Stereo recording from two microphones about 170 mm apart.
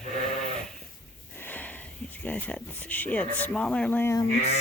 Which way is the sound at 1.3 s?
10° left (ahead or behind).